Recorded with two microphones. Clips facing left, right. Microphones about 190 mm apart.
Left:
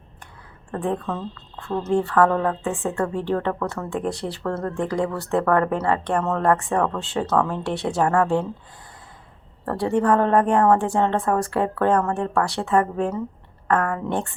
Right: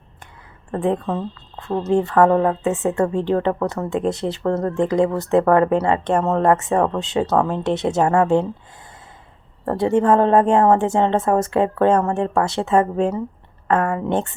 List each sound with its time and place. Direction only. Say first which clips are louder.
0.7 s speech: right 5 dB; 20° right (ahead or behind)
9.6 s speech: right 4 dB; 20° right (ahead or behind)